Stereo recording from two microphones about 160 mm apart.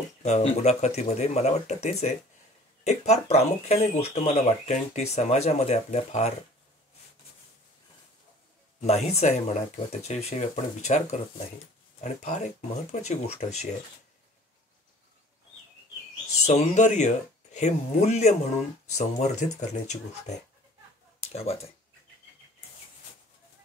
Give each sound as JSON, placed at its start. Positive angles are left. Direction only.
{"t": 0.2, "sound": "speech", "side_deg": 40}
{"t": 8.8, "sound": "speech", "side_deg": 40}
{"t": 16.4, "sound": "speech", "side_deg": 45}
{"t": 21.2, "sound": "a sound", "side_deg": 40}